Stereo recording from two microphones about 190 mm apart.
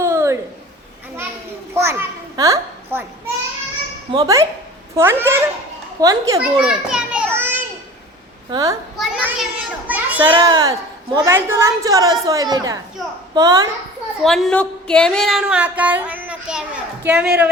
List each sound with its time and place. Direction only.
0.0 s a sound: 15° right (ahead or behind)
1.7 s a sound: 15° right (ahead or behind)
4.1 s a woman's voice: 20° right (ahead or behind)
6.6 s children playing: 5° right (ahead or behind)
8.4 s a child's voice: 20° right (ahead or behind)
9.0 s a child's voice: 5° right (ahead or behind)
10.2 s a woman's voice: 25° right (ahead or behind)
14.2 s a woman's voice: centre (ahead or behind)